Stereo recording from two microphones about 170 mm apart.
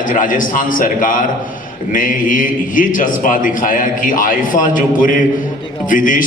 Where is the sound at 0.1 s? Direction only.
50° left (ahead or behind).